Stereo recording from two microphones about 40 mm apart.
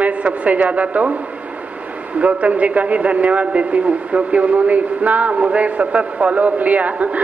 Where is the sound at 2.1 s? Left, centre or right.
Right.